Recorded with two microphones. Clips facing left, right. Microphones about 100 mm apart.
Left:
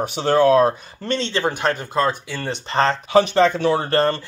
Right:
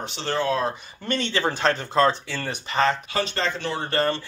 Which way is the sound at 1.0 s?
25° left (ahead or behind).